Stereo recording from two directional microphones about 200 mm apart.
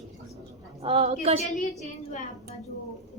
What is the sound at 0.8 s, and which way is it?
Speech, 30° right (ahead or behind).